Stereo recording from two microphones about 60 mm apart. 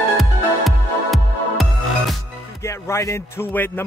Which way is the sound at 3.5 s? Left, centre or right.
Left.